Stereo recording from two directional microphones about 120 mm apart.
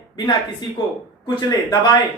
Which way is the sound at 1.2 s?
35° left (ahead or behind).